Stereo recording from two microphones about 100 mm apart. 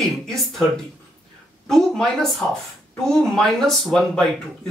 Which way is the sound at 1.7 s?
Centre (ahead or behind).